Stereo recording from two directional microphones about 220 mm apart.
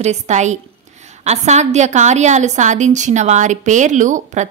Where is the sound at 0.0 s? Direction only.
30° right (ahead or behind).